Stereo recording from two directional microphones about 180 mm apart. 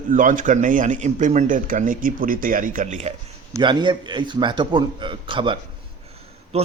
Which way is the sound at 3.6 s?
25° right (ahead or behind).